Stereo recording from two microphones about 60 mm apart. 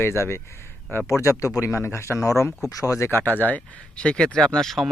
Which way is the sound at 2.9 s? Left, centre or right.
Left.